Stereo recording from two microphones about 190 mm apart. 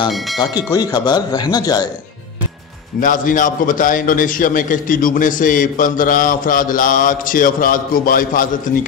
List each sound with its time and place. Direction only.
0.4 s speech: 20° left (ahead or behind)
3.0 s a man's voice: 45° left (ahead or behind)